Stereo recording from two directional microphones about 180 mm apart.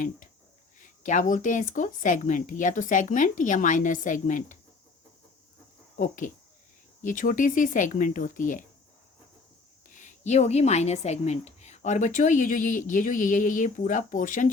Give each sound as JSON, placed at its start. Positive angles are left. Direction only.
{"t": 0.8, "sound": "a woman's voice", "side_deg": 45}
{"t": 6.0, "sound": "a woman's voice", "side_deg": 45}
{"t": 9.9, "sound": "a woman's voice", "side_deg": 40}